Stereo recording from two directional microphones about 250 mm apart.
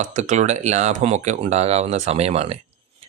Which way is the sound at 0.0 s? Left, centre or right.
Right.